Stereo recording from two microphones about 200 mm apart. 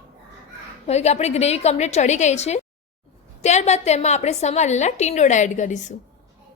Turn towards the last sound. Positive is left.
turn(degrees=35)  # may be behind; listen again after turning